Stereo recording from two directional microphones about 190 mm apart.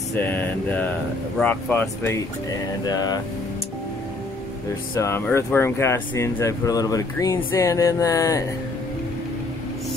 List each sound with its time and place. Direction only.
0.1 s speech: 10° left (ahead or behind)
2.8 s speech: 20° left (ahead or behind)
4.9 s speech: 15° left (ahead or behind)